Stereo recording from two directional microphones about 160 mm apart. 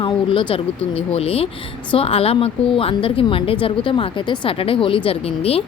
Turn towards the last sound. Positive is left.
turn(degrees=40)  # may be behind; listen again after turning